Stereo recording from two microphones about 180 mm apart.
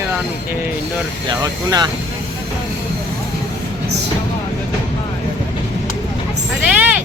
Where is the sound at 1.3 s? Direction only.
20° right (ahead or behind).